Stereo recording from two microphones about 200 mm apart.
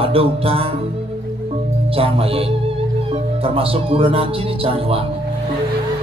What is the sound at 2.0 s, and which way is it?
Speech, 30° right (ahead or behind).